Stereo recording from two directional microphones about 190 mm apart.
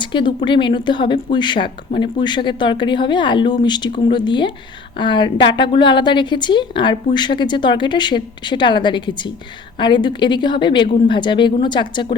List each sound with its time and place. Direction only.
0.0 s speech: 25° left (ahead or behind)